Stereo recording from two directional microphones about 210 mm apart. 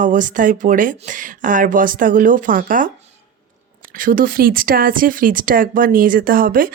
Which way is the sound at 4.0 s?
40° right (ahead or behind).